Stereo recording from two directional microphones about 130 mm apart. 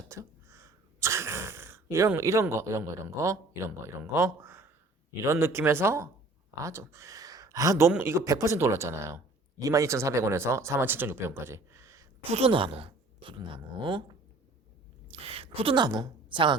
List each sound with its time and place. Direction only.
0.1 s speech: 25° right (ahead or behind)
12.3 s speech: 45° right (ahead or behind)
15.1 s a woman's voice: 50° right (ahead or behind)